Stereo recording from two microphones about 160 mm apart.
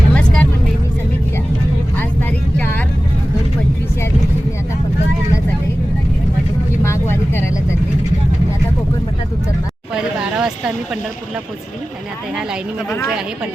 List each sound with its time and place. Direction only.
0.1 s vehicle: 5° left (ahead or behind)
6.8 s vehicle: 15° left (ahead or behind)
9.9 s vehicle: 5° right (ahead or behind)